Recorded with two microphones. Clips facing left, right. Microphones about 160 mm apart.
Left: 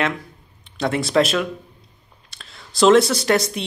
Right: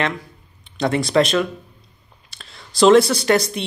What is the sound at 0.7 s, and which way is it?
Speech, centre (ahead or behind).